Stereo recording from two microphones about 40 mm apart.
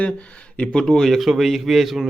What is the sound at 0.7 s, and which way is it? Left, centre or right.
Speech, centre.